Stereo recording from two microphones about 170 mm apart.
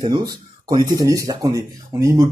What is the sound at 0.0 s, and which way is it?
Speech, 25° right (ahead or behind).